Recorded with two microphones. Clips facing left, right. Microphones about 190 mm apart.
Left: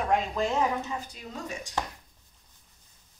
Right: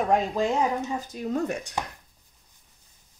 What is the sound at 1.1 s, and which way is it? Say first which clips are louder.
Speech: right 10 dB; 55° right (ahead or behind).